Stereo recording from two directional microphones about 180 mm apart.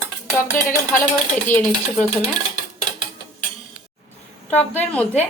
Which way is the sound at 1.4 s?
10° left (ahead or behind).